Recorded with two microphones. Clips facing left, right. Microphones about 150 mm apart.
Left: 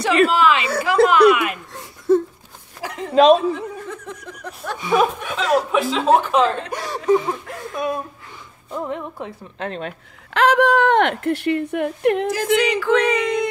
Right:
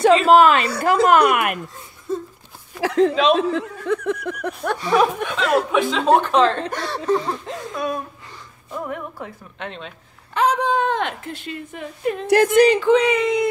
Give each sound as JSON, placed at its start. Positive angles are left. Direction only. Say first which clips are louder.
{"t": 0.3, "sound": "a woman's voice", "louder": "right 5 dB", "side_deg": -50}
{"t": 1.7, "sound": "a sound", "louder": "left 10 dB", "side_deg": 85}
{"t": 2.8, "sound": "speech", "louder": "left 1 dB", "side_deg": -90}
{"t": 4.7, "sound": "speech", "louder": "left 1 dB", "side_deg": 5}
{"t": 7.7, "sound": "a woman's voice", "louder": "left 2 dB", "side_deg": 20}
{"t": 9.8, "sound": "speech", "louder": "left 7 dB", "side_deg": 75}
{"t": 12.5, "sound": "speech", "louder": "right 5 dB", "side_deg": -30}
{"t": 12.9, "sound": "speech", "louder": "right 1 dB", "side_deg": -5}